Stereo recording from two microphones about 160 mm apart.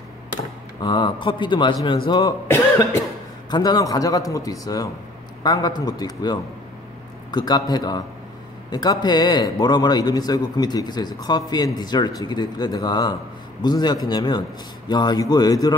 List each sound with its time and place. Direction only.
0.8 s a man's voice: 30° left (ahead or behind)
3.4 s a man's voice: 25° left (ahead or behind)